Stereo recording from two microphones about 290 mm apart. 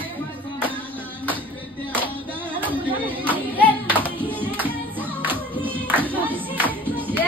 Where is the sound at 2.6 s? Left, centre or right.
Centre.